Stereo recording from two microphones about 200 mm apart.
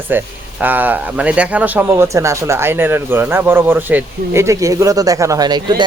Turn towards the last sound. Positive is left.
turn(degrees=-20)  # may be behind; listen again after turning